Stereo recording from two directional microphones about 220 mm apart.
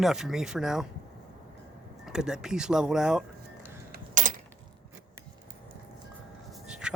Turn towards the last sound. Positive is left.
turn(degrees=-5)  # may be behind; listen again after turning